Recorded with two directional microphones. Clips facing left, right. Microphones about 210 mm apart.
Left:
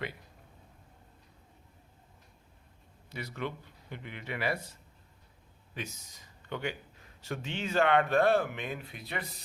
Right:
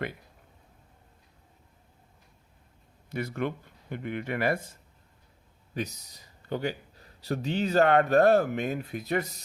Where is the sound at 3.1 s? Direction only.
50° right (ahead or behind).